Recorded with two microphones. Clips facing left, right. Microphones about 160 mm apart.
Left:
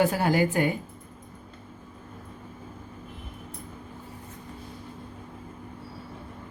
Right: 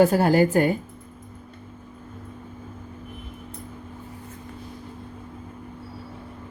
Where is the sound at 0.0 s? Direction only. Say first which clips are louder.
Right 6 dB; 45° right (ahead or behind).